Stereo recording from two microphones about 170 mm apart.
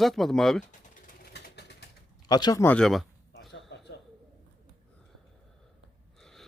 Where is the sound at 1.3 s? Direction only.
80° left.